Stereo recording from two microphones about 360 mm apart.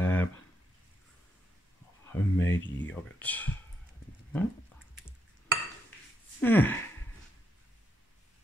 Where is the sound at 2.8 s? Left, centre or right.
Centre.